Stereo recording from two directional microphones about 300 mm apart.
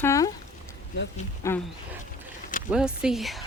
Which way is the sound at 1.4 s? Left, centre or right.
Centre.